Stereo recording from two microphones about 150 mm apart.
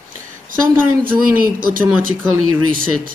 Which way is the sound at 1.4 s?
70° right (ahead or behind).